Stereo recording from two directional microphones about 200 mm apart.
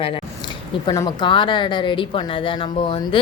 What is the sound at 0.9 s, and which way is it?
Speech, 20° left (ahead or behind).